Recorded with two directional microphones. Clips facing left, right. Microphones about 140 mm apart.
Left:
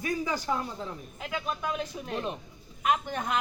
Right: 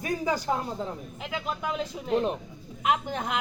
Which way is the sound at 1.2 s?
20° right (ahead or behind).